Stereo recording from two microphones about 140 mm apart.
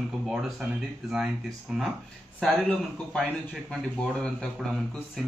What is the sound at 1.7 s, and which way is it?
Speech, 5° right (ahead or behind).